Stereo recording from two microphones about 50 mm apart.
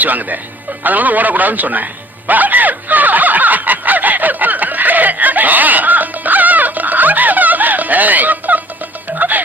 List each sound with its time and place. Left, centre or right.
0.0 s speech: right
0.8 s music: right